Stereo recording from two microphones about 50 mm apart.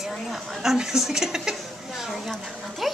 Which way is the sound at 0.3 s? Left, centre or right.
Centre.